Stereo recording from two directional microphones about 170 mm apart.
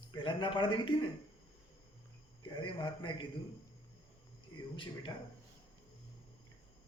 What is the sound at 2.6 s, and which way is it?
Speech, 30° left (ahead or behind).